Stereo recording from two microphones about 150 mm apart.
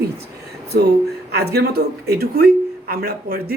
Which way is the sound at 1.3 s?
90° right.